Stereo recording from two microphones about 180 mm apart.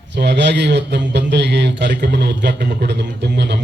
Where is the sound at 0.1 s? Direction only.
70° right (ahead or behind).